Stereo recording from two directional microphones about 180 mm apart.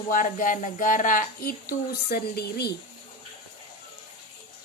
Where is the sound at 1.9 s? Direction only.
60° left (ahead or behind).